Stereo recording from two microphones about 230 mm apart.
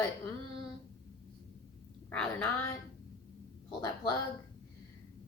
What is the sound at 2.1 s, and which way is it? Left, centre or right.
Speech, centre.